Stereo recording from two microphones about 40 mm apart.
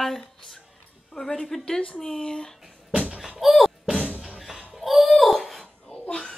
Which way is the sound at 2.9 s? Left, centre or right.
Right.